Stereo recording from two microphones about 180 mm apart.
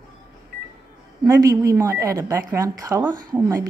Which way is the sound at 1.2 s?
20° right (ahead or behind).